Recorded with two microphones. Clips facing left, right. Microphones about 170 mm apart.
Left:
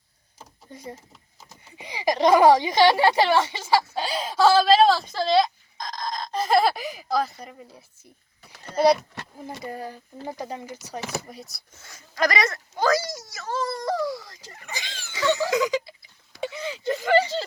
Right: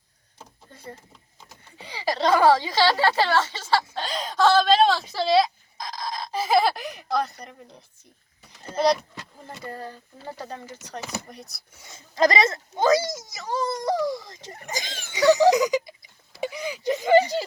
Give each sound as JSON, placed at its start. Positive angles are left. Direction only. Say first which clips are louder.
{"t": 0.3, "sound": "a sound", "louder": "left 4 dB", "side_deg": 10}
{"t": 1.8, "sound": "a woman's voice", "louder": "left 4 dB", "side_deg": 15}
{"t": 9.4, "sound": "speech", "louder": "left 3 dB", "side_deg": 15}
{"t": 11.8, "sound": "speech", "louder": "right 4 dB", "side_deg": -25}
{"t": 14.5, "sound": "speech", "louder": "right 4 dB", "side_deg": -40}
{"t": 15.1, "sound": "a sound", "louder": "right 6 dB", "side_deg": -20}